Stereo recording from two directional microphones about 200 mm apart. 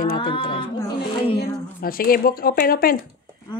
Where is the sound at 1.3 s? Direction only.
50° left (ahead or behind).